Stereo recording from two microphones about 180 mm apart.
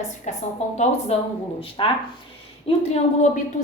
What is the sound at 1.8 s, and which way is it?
A woman's voice, 30° left (ahead or behind).